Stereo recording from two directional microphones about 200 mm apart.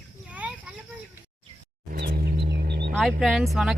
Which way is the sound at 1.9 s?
50° right (ahead or behind).